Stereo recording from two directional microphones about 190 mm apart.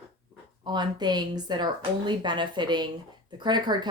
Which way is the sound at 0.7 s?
20° right (ahead or behind).